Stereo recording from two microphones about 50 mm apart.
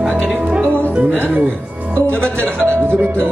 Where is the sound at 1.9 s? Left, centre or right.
Right.